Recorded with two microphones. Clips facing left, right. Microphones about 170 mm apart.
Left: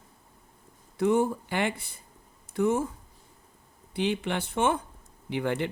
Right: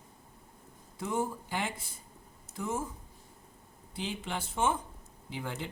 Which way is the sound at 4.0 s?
70° left (ahead or behind).